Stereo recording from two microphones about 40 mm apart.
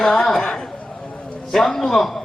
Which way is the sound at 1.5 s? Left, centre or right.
Centre.